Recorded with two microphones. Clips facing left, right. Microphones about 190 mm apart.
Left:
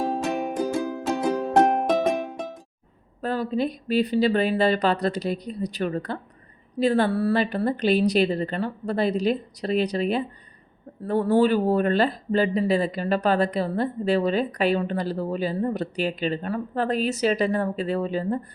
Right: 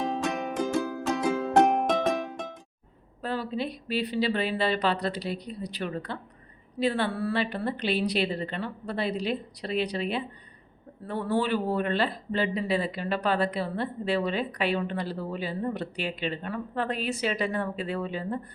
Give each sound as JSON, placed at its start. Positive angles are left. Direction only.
{"t": 0.0, "sound": "music", "side_deg": 30}
{"t": 1.9, "sound": "music", "side_deg": 10}
{"t": 3.2, "sound": "speech", "side_deg": 45}